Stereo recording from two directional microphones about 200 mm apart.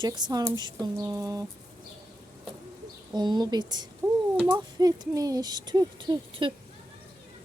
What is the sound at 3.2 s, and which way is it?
Speech, 20° right (ahead or behind).